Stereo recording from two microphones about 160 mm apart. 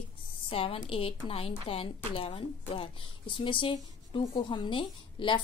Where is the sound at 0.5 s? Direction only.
35° left (ahead or behind).